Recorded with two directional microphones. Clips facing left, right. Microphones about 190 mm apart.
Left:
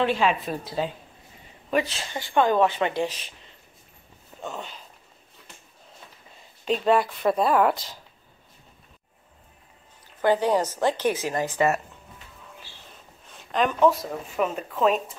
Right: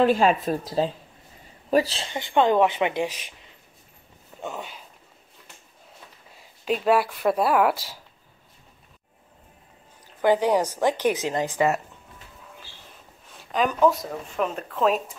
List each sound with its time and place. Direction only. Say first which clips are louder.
0.0 s speech: right 4 dB; 40° right (ahead or behind)
2.1 s speech: right 1 dB; 20° right (ahead or behind)
4.4 s speech: right 1 dB; 10° right (ahead or behind)
6.3 s speech: even; 5° right (ahead or behind)
10.2 s speech: right 1 dB; 15° right (ahead or behind)
13.4 s speech: even; 5° right (ahead or behind)